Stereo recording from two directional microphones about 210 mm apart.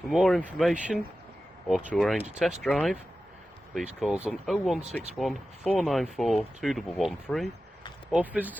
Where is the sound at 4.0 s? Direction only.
5° right (ahead or behind).